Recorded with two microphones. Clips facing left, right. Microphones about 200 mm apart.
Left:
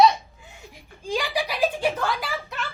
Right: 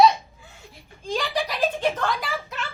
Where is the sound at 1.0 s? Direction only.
10° left (ahead or behind).